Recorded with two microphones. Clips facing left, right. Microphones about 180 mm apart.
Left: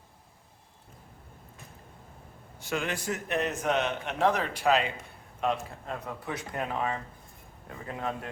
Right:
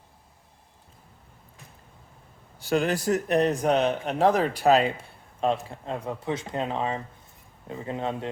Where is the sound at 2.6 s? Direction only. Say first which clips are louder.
Right 8 dB; 35° right (ahead or behind).